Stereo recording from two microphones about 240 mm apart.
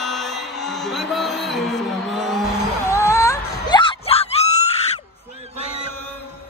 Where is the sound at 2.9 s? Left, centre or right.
Centre.